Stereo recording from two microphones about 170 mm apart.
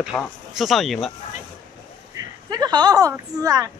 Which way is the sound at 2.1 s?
25° right (ahead or behind).